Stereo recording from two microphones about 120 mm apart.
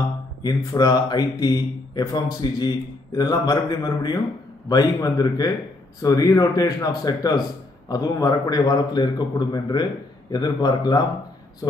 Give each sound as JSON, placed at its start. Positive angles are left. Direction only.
{"t": 0.4, "sound": "speech", "side_deg": 35}